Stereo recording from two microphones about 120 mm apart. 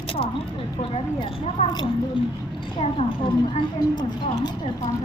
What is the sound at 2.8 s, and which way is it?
Speech, 50° left (ahead or behind).